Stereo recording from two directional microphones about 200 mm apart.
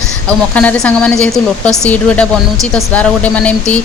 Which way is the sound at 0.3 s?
5° left (ahead or behind).